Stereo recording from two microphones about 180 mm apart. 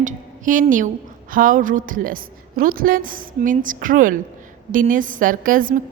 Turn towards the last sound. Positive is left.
turn(degrees=-50)  # may be behind; listen again after turning